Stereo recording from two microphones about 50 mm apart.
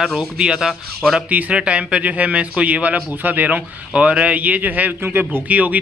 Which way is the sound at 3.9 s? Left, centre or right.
Right.